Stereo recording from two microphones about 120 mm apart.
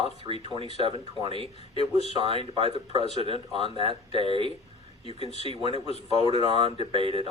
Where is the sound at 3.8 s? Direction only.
45° right (ahead or behind).